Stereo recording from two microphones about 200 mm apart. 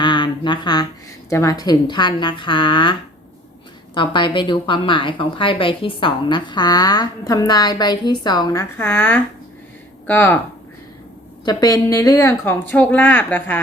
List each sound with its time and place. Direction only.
0.0 s a sound: 25° left (ahead or behind)
1.3 s a woman's voice: 15° left (ahead or behind)
3.9 s a woman's voice: 25° left (ahead or behind)
11.4 s a woman's voice: 15° left (ahead or behind)